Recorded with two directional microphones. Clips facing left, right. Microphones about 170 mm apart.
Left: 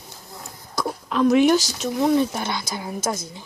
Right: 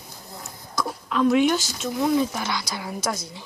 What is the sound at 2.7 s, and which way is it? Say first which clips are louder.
Speech: left 2 dB; 25° left (ahead or behind).